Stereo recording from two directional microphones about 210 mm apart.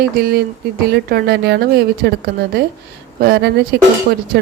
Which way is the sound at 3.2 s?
50° right (ahead or behind).